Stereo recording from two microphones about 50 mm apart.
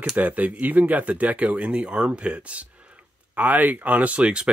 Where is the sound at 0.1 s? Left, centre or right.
Right.